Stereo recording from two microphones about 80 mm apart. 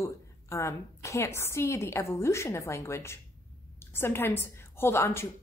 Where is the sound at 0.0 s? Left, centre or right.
Left.